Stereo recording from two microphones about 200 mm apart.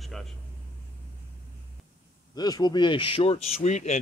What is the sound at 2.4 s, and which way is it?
Speech, 20° left (ahead or behind).